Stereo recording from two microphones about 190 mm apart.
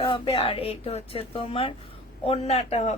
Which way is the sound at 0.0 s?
25° left (ahead or behind).